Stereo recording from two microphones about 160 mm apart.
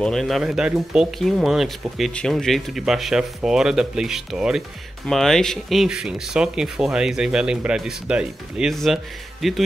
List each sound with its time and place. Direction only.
0.0 s speech: centre (ahead or behind)